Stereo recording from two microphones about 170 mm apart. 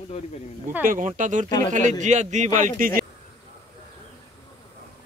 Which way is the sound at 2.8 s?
55° right (ahead or behind).